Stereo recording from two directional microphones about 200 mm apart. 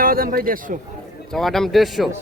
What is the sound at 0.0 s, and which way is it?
Speech, 45° right (ahead or behind).